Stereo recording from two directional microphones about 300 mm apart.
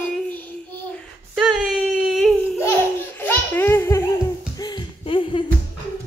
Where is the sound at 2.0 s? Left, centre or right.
Centre.